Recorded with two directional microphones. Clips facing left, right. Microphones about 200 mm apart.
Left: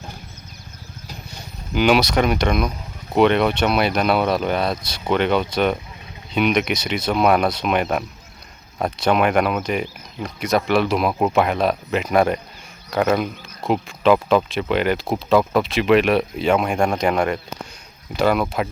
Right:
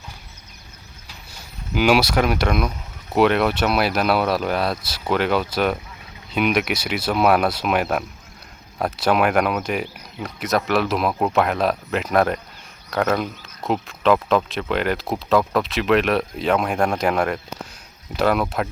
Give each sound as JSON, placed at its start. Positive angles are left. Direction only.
{"t": 1.7, "sound": "speech", "side_deg": -5}